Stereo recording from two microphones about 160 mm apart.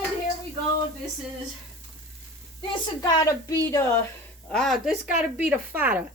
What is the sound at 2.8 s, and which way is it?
A woman's voice, 25° left (ahead or behind).